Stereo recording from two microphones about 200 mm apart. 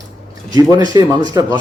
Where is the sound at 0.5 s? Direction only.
20° right (ahead or behind).